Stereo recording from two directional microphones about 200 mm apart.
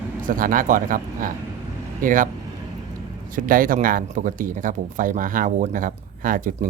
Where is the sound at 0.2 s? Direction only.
45° right (ahead or behind).